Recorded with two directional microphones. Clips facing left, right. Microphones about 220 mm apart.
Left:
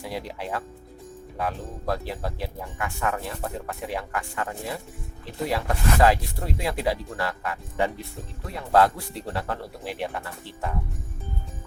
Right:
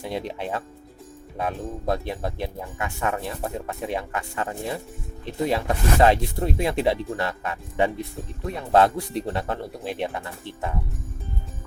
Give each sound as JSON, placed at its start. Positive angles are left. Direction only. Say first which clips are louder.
{"t": 0.0, "sound": "speech", "louder": "right 3 dB", "side_deg": -25}